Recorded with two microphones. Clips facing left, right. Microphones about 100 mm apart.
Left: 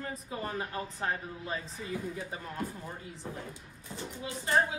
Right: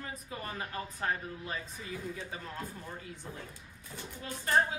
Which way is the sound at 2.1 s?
10° left (ahead or behind).